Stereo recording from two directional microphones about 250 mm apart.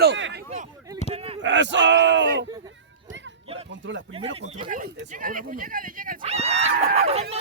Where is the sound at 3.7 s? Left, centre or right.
Right.